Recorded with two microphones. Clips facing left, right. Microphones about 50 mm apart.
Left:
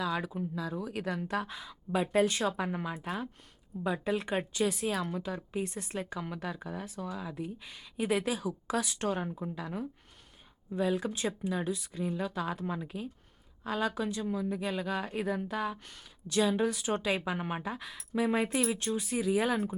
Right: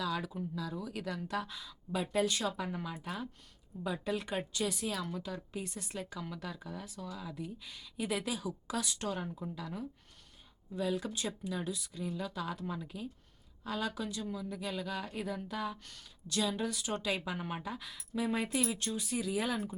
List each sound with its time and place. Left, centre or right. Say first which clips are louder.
0.0 s a woman's voice: left 3 dB; left
8.4 s speech: left 5 dB; centre
9.0 s a woman's voice: left 5 dB; left